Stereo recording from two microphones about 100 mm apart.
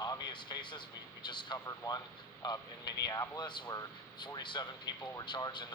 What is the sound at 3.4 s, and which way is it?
Speech, 50° left (ahead or behind).